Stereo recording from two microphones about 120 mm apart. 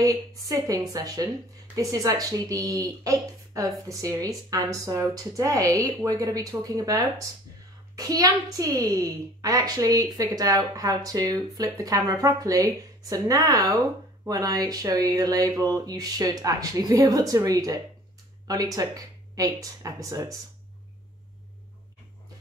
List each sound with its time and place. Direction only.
0.0 s a child's voice: 30° right (ahead or behind)